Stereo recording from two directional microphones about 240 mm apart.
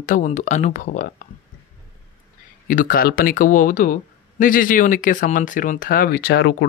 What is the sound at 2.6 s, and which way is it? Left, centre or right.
Speech, left.